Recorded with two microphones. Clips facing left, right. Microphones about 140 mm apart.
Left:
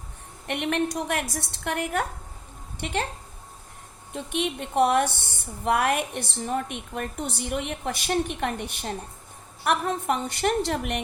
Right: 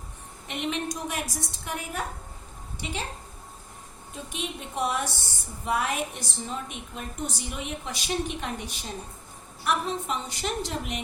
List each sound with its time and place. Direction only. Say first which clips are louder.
0.4 s a woman's voice: left 5 dB; 60° left (ahead or behind)
4.1 s a woman's voice: left 7 dB; 65° left (ahead or behind)